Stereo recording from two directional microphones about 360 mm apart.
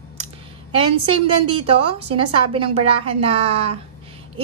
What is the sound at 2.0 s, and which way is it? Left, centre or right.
A woman's voice, centre.